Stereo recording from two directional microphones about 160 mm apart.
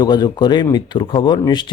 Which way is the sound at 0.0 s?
25° left (ahead or behind).